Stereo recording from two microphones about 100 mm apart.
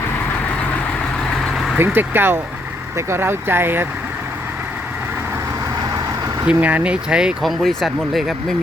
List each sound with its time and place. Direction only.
1.4 s vehicle: centre (ahead or behind)
1.8 s speech: 20° right (ahead or behind)
6.4 s speech: 15° right (ahead or behind)